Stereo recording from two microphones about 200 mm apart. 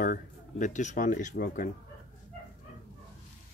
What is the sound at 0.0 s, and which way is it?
Speech, 40° left (ahead or behind).